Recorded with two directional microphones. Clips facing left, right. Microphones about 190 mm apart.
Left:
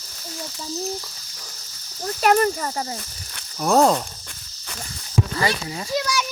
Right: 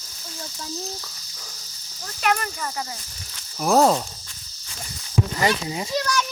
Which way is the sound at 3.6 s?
Centre (ahead or behind).